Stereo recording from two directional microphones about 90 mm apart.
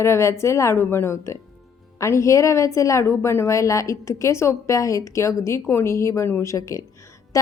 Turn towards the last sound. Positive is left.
turn(degrees=40)  # may be behind; listen again after turning